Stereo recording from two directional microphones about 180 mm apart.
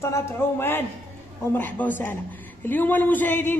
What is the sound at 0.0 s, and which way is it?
A man's voice, 15° left (ahead or behind).